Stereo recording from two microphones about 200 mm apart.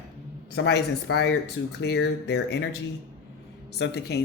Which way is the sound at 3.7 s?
55° left (ahead or behind).